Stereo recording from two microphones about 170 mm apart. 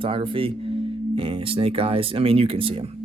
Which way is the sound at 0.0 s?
30° right (ahead or behind).